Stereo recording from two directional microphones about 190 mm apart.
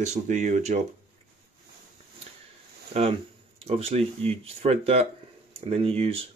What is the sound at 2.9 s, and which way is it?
Speech, 35° right (ahead or behind).